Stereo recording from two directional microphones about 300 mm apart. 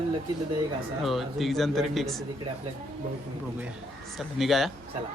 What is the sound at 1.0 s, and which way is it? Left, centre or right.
Speech, centre.